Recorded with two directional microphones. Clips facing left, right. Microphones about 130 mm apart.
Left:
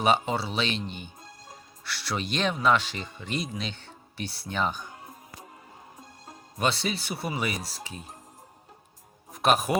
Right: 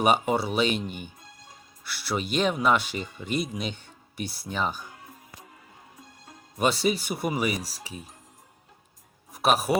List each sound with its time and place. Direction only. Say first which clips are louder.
0.0 s speech: right 2 dB; 10° right (ahead or behind)
6.6 s speech: right 4 dB; 10° right (ahead or behind)
9.3 s speech: even; 5° right (ahead or behind)